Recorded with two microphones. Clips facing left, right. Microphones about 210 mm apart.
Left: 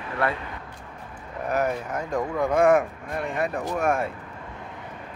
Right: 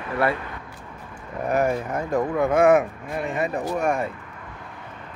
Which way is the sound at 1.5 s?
10° right (ahead or behind).